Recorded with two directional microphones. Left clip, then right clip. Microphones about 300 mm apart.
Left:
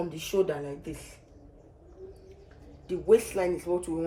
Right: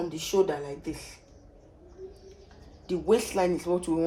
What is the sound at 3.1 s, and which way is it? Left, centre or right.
Speech, right.